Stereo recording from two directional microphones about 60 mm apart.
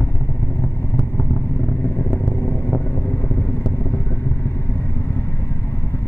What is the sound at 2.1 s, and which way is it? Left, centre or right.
Vehicle, left.